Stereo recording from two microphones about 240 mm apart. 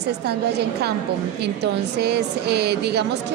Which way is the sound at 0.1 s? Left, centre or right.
Right.